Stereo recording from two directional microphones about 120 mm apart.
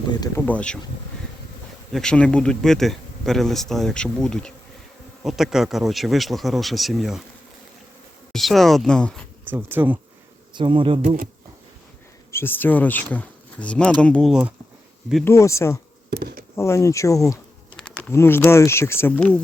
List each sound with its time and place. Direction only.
0.3 s speech: 15° left (ahead or behind)
1.9 s speech: 5° left (ahead or behind)
8.3 s speech: centre (ahead or behind)
9.4 s speech: 15° right (ahead or behind)
10.5 s speech: 45° right (ahead or behind)
12.3 s speech: 20° left (ahead or behind)
14.3 s speech: 10° right (ahead or behind)
15.2 s speech: 25° left (ahead or behind)
17.7 s a sound: 10° left (ahead or behind)
18.1 s speech: 20° left (ahead or behind)